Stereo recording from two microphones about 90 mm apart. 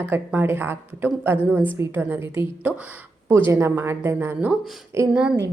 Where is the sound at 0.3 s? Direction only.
25° right (ahead or behind).